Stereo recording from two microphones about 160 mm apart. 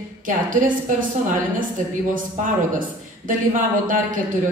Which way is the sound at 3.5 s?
55° right (ahead or behind).